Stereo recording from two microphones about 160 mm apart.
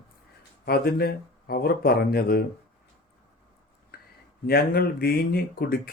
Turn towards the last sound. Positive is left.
turn(degrees=70)  # may be behind; listen again after turning